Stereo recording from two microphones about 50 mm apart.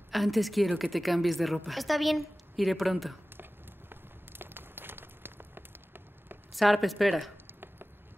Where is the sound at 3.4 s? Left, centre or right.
Right.